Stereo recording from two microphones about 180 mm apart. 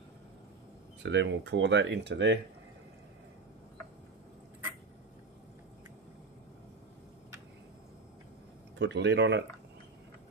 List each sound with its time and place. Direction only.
1.0 s speech: 80° right
8.7 s speech: 75° right (ahead or behind)